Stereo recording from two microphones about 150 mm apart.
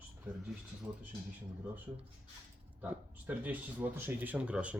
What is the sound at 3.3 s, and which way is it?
Speech, 10° right (ahead or behind).